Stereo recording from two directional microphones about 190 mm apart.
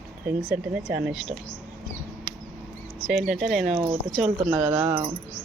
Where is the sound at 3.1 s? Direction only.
Centre (ahead or behind).